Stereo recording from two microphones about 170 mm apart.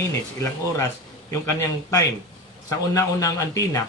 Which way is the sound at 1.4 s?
15° left (ahead or behind).